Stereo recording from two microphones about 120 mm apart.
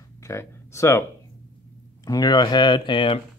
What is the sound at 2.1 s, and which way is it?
Speech, 35° left (ahead or behind).